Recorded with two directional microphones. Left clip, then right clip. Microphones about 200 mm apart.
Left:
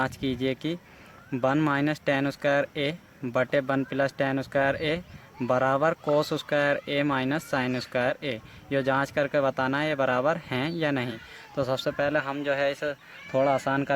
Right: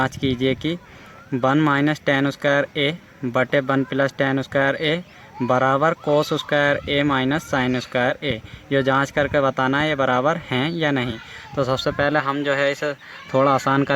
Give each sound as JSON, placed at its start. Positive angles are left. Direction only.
{"t": 0.0, "sound": "speech", "side_deg": -10}